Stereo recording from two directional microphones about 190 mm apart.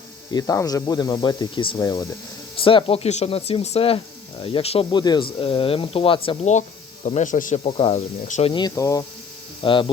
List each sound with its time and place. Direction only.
0.3 s speech: 20° left (ahead or behind); by 7.6 s 45° left (ahead or behind)
7.6 s speech: 30° left (ahead or behind)